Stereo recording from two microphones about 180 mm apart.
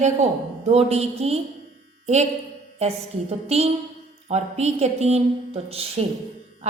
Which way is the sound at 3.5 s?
35° right (ahead or behind).